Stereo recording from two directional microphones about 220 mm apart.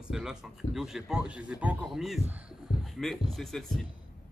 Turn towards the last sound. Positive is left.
turn(degrees=0)  # may be behind; listen again after turning